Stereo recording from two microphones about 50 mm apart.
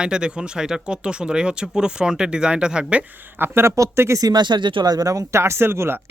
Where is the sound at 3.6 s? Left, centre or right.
Right.